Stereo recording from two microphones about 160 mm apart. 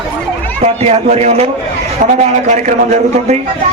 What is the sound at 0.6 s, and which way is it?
A man's voice, 40° right (ahead or behind).